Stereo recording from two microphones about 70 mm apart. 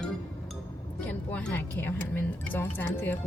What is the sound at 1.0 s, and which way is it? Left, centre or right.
A woman's voice, left.